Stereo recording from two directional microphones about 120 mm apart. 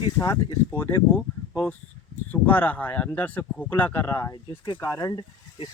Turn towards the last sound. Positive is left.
turn(degrees=35)  # may be behind; listen again after turning